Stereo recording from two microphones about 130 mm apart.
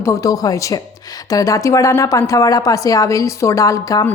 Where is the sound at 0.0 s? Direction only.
25° left (ahead or behind).